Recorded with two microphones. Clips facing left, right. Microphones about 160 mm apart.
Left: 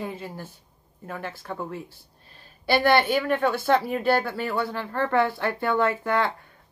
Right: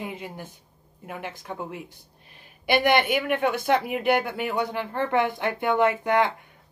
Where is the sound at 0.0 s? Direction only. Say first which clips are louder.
Left 1 dB; 15° right (ahead or behind).